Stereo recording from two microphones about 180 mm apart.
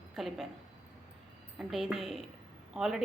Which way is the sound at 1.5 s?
Centre (ahead or behind).